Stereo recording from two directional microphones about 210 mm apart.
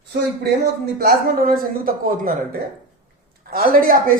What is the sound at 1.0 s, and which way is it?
Speech, 45° right (ahead or behind).